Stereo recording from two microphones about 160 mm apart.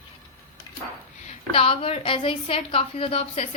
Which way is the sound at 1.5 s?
35° left (ahead or behind).